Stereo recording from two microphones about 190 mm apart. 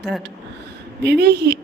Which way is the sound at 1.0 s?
60° right (ahead or behind).